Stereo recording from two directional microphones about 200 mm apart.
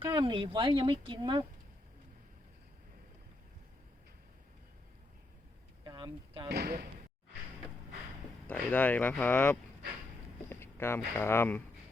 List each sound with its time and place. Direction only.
0.0 s speech: 25° right (ahead or behind)
5.8 s a sound: 20° right (ahead or behind)
6.5 s speech: 50° right (ahead or behind)
8.4 s speech: 10° left (ahead or behind)